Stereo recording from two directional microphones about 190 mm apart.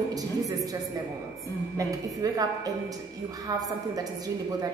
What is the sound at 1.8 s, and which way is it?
Speech, 20° right (ahead or behind).